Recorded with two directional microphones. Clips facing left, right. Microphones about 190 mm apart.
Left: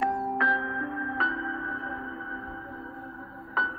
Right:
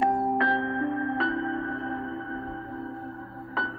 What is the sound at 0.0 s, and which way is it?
Music, 25° right (ahead or behind).